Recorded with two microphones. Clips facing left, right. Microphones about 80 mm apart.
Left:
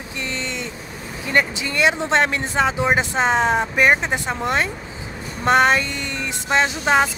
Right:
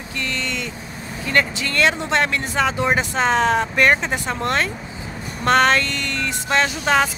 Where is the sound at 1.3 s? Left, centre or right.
Centre.